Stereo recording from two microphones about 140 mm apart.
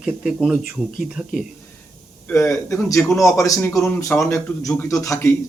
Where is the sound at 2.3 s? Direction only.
20° left (ahead or behind).